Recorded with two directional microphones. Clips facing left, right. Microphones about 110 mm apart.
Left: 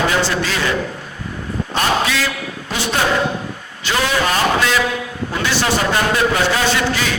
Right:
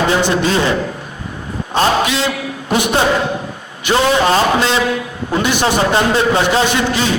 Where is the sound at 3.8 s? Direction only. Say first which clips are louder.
Right 5 dB; 25° right (ahead or behind).